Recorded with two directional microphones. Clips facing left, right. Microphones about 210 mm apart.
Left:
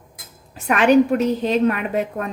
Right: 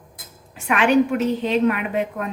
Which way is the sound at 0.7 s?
40° left (ahead or behind).